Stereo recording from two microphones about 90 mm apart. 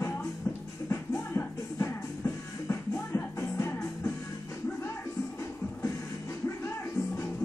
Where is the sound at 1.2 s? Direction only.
30° left (ahead or behind).